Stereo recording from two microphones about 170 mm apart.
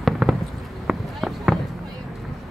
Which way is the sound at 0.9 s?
Centre (ahead or behind).